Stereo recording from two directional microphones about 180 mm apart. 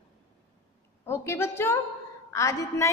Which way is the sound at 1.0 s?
15° left (ahead or behind).